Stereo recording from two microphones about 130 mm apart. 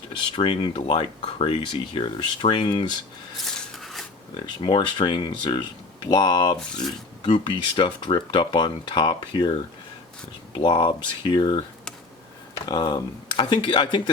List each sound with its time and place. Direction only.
0.1 s speech: 40° left (ahead or behind)
3.8 s pig: centre (ahead or behind)
4.4 s speech: 35° left (ahead or behind)